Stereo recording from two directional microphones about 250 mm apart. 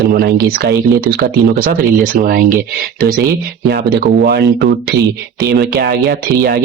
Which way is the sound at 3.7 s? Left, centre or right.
Right.